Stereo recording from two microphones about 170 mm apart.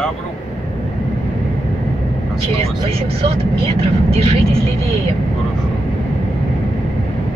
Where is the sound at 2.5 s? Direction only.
35° right (ahead or behind).